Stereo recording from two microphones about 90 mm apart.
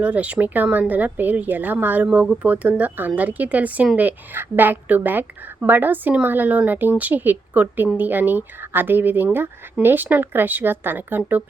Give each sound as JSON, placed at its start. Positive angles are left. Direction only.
{"t": 0.0, "sound": "a woman's voice", "side_deg": -15}